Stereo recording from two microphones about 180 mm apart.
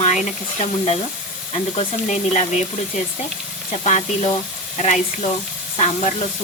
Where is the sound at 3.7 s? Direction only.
40° left (ahead or behind).